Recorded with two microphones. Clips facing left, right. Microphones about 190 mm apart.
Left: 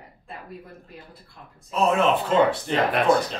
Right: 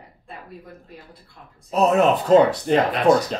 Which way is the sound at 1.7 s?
40° right (ahead or behind).